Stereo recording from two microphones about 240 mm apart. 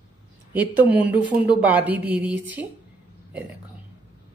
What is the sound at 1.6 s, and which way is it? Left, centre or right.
A woman's voice, centre.